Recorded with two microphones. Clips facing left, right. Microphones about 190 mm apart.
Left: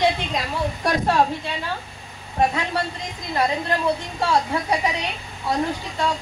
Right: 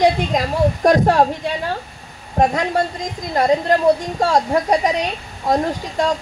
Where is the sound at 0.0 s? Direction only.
45° right (ahead or behind).